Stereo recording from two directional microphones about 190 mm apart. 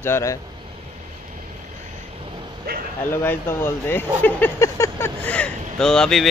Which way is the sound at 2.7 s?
55° right (ahead or behind).